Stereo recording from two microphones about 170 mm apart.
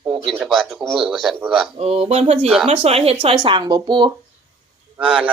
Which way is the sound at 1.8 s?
35° right (ahead or behind).